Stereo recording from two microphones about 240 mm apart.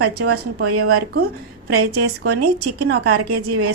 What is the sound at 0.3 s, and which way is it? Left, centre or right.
A woman's voice, right.